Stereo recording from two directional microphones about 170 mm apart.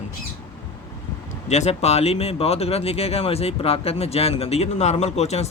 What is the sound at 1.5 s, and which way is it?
Speech, 40° left (ahead or behind).